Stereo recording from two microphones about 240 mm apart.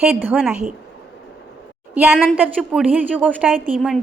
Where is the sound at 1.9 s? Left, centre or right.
Centre.